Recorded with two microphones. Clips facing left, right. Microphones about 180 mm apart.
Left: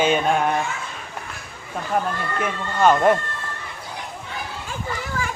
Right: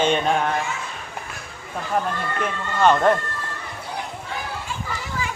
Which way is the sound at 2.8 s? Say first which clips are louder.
Left 1 dB; 10° left (ahead or behind).